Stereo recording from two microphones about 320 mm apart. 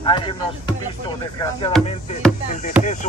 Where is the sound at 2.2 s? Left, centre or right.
Centre.